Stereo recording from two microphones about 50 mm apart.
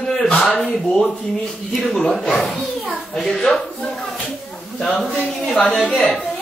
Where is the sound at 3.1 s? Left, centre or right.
Centre.